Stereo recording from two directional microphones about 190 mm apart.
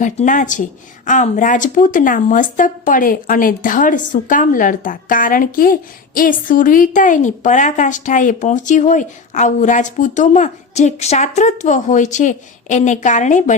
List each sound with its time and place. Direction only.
0.0 s a woman's voice: 40° left (ahead or behind)